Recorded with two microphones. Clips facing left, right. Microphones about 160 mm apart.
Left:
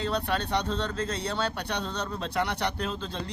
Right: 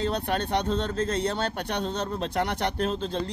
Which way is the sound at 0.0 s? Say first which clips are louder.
Right 2 dB; 50° right (ahead or behind).